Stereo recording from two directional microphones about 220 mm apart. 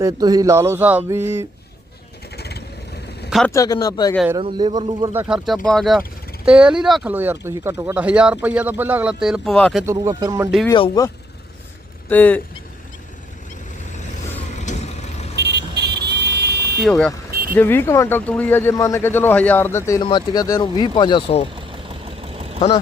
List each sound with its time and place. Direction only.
0.0 s speech: 15° right (ahead or behind)
2.3 s vehicle: 45° left (ahead or behind)
3.2 s a sound: centre (ahead or behind)
3.5 s speech: 15° left (ahead or behind)
4.4 s speech: 20° right (ahead or behind)
5.6 s speech: centre (ahead or behind)
9.8 s speech: 15° right (ahead or behind)
10.7 s speech: 20° left (ahead or behind)
12.0 s speech: 5° left (ahead or behind)
14.5 s vehicle: 35° left (ahead or behind)
15.4 s vehicle: 50° right (ahead or behind)
16.8 s speech: 5° left (ahead or behind); by 21.4 s 25° left (ahead or behind)
21.5 s vehicle: 25° right (ahead or behind)